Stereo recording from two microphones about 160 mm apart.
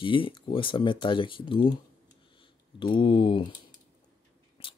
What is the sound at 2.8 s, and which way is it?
Speech, 30° left (ahead or behind).